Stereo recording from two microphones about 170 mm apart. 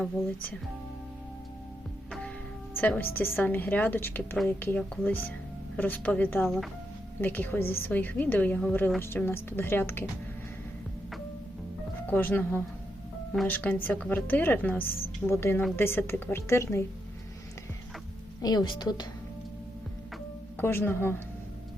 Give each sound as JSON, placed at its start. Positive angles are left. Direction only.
{"t": 0.0, "sound": "a woman's voice", "side_deg": 5}
{"t": 2.7, "sound": "a woman's voice", "side_deg": 10}
{"t": 12.1, "sound": "a woman's voice", "side_deg": 10}
{"t": 18.4, "sound": "a woman's voice", "side_deg": 25}
{"t": 20.6, "sound": "a woman's voice", "side_deg": 15}